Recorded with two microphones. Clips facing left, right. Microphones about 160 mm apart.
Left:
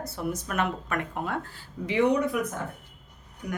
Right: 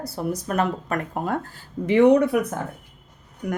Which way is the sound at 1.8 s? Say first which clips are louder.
Right 8 dB; 55° right (ahead or behind).